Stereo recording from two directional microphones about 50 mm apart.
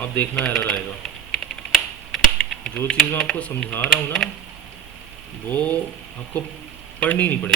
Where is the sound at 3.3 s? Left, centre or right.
Centre.